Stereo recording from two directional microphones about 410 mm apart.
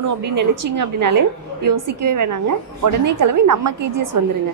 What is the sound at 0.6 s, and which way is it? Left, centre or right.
A woman's voice, right.